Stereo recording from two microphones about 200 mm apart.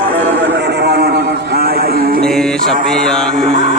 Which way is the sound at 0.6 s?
55° right (ahead or behind).